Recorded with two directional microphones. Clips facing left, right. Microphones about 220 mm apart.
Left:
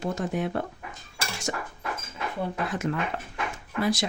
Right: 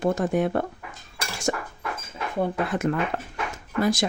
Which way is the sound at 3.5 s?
45° right (ahead or behind).